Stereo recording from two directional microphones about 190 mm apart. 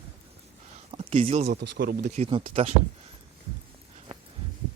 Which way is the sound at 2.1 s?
30° right (ahead or behind).